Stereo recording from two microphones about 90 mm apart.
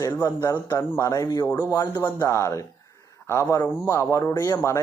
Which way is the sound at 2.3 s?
35° left (ahead or behind).